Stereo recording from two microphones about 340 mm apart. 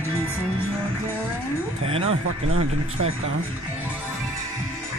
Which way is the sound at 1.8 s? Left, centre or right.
Centre.